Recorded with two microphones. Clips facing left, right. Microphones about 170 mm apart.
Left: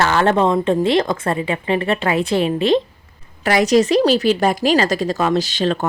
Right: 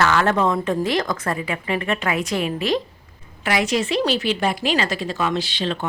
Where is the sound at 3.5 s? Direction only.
40° left (ahead or behind).